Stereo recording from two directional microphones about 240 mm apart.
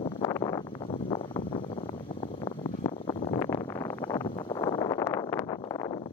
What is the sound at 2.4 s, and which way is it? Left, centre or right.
Wind noise, left.